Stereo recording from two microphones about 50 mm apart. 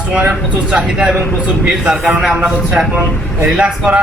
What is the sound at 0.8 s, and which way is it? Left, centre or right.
Speech, centre.